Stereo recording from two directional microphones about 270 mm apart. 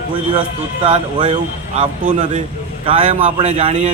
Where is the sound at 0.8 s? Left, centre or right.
Centre.